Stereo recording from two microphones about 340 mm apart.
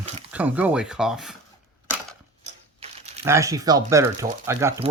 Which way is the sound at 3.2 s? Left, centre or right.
Centre.